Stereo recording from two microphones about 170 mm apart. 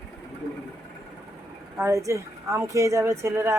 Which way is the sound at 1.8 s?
15° right (ahead or behind).